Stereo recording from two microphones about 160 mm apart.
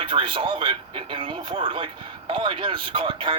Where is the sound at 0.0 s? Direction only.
35° right (ahead or behind).